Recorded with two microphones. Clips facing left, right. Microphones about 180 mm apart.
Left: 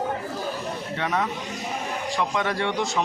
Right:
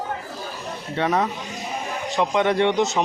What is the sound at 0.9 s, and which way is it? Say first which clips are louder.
Speech: right 5 dB; 35° right (ahead or behind).